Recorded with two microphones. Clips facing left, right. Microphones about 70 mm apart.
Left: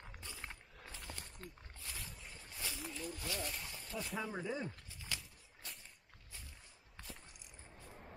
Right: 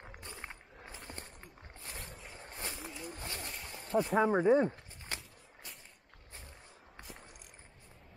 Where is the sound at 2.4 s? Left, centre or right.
Right.